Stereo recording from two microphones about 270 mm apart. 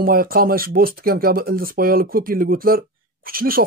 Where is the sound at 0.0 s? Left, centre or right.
Right.